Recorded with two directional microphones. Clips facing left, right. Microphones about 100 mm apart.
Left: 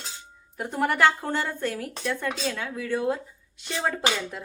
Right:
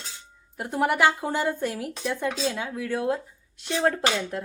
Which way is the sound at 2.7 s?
5° right (ahead or behind).